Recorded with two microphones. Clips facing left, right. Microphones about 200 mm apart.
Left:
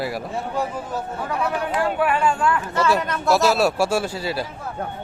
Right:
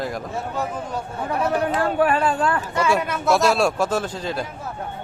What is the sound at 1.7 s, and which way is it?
Speech, 35° right (ahead or behind).